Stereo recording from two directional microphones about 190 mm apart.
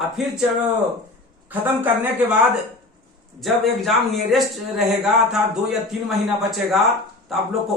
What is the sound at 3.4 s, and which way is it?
A man's voice, centre (ahead or behind).